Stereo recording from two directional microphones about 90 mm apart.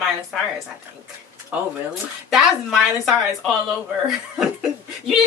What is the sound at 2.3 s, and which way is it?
Speech, 5° right (ahead or behind).